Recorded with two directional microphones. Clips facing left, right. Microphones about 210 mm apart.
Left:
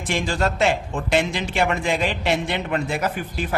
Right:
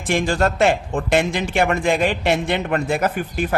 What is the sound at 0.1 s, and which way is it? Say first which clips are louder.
A man's voice: right 4 dB; 50° right (ahead or behind).